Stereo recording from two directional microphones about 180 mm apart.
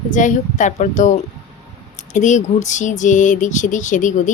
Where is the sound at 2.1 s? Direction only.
40° left (ahead or behind).